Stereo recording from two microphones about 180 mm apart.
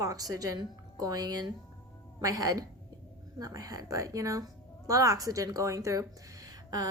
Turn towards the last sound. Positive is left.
turn(degrees=-20)  # may be behind; listen again after turning